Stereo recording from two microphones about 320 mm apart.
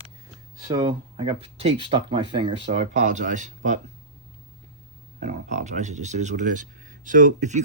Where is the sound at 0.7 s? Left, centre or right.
Centre.